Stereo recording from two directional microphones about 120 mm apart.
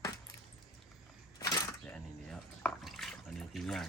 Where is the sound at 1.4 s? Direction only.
30° left (ahead or behind).